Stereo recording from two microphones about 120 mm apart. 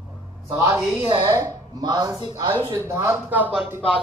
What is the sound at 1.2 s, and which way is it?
Speech, 30° right (ahead or behind).